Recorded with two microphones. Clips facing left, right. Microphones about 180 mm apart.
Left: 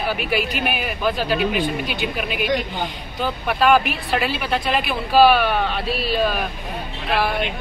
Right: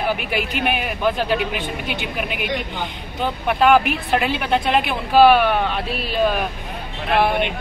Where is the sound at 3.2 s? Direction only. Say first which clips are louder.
Right 2 dB; 20° right (ahead or behind).